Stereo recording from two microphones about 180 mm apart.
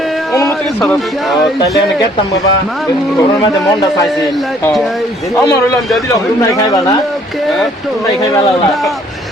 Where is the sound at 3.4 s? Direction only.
25° left (ahead or behind).